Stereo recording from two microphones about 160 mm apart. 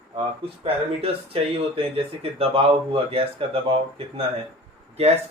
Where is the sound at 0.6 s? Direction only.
35° right (ahead or behind).